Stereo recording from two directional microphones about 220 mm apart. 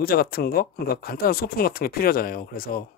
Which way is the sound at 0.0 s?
45° left (ahead or behind).